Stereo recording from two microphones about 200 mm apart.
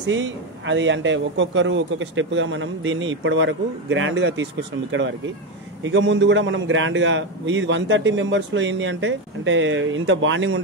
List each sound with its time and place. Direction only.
0.0 s a man's voice: 70° right (ahead or behind)
5.9 s a man's voice: 65° right (ahead or behind)